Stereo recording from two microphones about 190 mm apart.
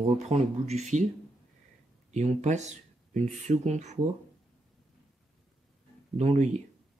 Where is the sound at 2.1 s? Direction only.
35° right (ahead or behind).